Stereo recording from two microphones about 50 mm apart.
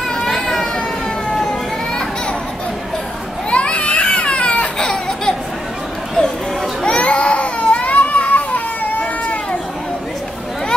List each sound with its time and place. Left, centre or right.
0.1 s children playing: centre
1.3 s a sound: centre
3.4 s baby cry: left
6.8 s baby cry: left